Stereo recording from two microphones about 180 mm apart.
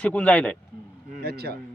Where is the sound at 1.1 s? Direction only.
60° right (ahead or behind).